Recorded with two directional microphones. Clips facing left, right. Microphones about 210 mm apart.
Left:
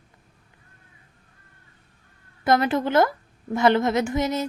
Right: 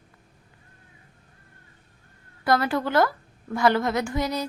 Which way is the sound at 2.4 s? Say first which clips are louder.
Left 2 dB; 20° left (ahead or behind).